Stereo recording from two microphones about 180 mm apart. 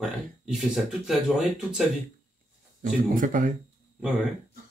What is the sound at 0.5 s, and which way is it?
Speech, centre (ahead or behind).